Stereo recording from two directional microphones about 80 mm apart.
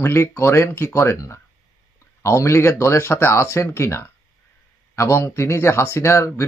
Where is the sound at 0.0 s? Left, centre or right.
Left.